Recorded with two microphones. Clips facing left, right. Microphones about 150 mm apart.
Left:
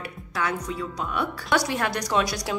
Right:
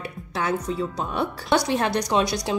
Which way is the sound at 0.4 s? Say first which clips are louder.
Right 3 dB; 25° right (ahead or behind).